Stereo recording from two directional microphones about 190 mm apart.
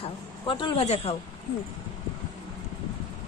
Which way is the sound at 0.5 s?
25° left (ahead or behind).